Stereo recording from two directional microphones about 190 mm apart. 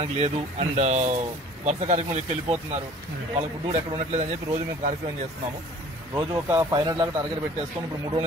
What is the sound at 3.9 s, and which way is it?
Speech, 35° right (ahead or behind).